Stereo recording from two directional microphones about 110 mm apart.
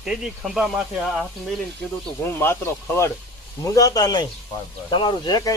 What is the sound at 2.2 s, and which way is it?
Speech, 20° left (ahead or behind).